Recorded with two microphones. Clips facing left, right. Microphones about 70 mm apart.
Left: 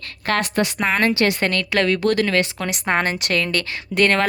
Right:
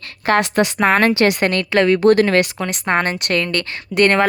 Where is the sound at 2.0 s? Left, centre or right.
Right.